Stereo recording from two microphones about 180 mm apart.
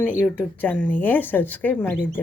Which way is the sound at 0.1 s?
10° right (ahead or behind).